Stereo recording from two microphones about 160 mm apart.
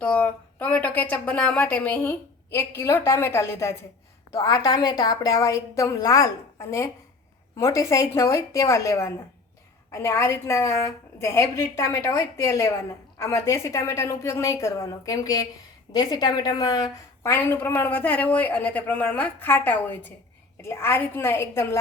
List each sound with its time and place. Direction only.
0.0 s a woman's voice: 10° left (ahead or behind)